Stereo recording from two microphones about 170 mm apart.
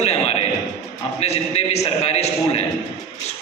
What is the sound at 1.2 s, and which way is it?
A man's voice, 40° left (ahead or behind).